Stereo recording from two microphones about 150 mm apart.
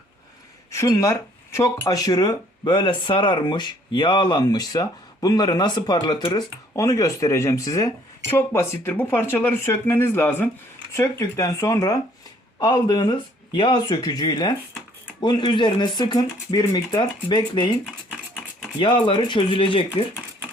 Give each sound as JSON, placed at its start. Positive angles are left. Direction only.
{"t": 0.7, "sound": "speech", "side_deg": 20}
{"t": 18.8, "sound": "speech", "side_deg": 35}